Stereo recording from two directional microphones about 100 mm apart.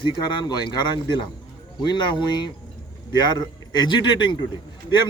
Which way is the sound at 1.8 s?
45° left (ahead or behind).